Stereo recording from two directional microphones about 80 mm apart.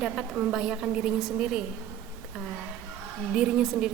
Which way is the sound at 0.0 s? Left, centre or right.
Centre.